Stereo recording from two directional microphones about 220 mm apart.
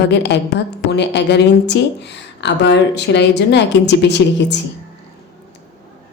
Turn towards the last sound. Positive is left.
turn(degrees=50)  # may be behind; listen again after turning